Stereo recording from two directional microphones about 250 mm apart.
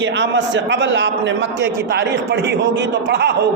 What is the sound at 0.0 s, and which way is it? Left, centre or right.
A man's voice, right.